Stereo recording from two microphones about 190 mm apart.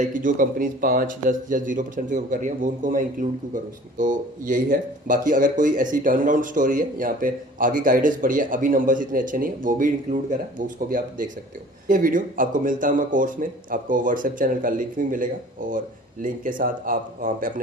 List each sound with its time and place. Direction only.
0.0 s speech: 45° right (ahead or behind)